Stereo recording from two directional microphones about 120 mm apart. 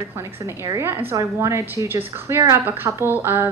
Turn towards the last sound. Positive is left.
turn(degrees=-20)  # may be behind; listen again after turning